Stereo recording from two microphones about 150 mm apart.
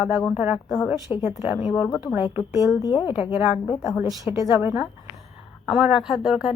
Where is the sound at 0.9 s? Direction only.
25° left (ahead or behind).